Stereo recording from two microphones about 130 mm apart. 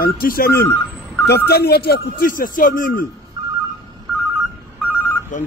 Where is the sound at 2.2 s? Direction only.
90° left.